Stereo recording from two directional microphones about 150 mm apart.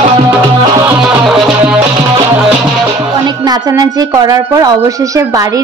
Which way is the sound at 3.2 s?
25° right (ahead or behind).